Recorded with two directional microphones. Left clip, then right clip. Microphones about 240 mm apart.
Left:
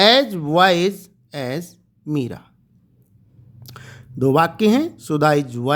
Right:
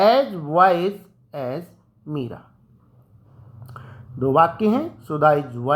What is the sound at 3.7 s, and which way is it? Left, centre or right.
Speech, left.